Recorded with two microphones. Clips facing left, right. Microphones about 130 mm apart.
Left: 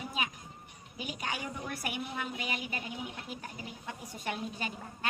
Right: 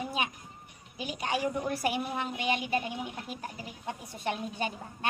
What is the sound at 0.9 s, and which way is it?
A woman's voice, 30° right (ahead or behind).